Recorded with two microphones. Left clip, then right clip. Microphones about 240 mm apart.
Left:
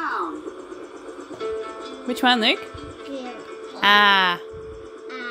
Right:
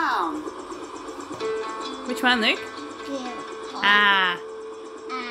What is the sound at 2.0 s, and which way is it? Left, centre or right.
Speech, left.